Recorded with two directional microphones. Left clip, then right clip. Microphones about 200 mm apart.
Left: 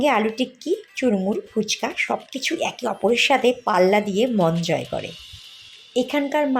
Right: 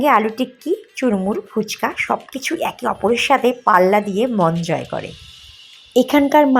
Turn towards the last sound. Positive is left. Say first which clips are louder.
# right 8 dB
turn(degrees=-35)  # may be behind; listen again after turning